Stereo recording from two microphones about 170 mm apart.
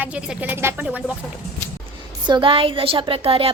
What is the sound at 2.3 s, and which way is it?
A woman's voice, 30° right (ahead or behind).